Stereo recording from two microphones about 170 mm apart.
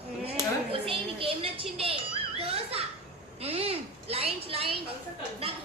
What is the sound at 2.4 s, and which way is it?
Children playing, 35° right (ahead or behind).